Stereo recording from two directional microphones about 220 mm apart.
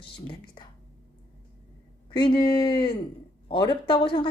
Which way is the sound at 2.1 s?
20° left (ahead or behind).